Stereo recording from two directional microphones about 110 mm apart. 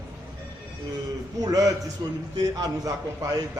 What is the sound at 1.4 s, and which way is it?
A man's voice, 30° right (ahead or behind).